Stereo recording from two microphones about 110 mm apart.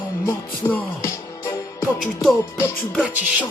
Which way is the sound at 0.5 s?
15° left (ahead or behind).